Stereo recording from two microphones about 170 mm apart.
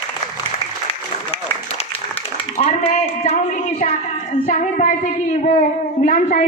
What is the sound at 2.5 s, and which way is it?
A man's voice, 40° left (ahead or behind).